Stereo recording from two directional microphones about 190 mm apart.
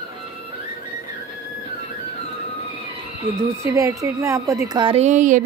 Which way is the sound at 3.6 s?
15° right (ahead or behind).